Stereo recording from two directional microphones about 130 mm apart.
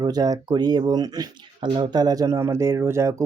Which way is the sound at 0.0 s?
30° right (ahead or behind).